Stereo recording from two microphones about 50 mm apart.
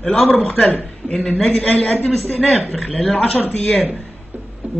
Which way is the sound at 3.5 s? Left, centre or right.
Left.